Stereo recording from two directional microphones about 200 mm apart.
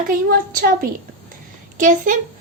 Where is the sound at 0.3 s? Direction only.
45° right (ahead or behind).